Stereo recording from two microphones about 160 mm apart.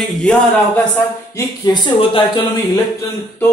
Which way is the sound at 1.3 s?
25° left (ahead or behind).